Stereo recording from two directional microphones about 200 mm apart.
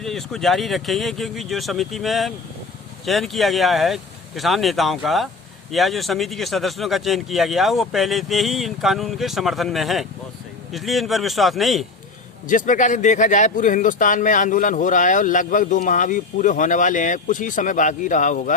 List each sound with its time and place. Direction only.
0.0 s speech: centre (ahead or behind)
12.5 s speech: 40° left (ahead or behind)